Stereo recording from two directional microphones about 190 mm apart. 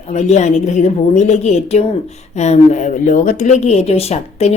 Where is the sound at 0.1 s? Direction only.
35° left (ahead or behind).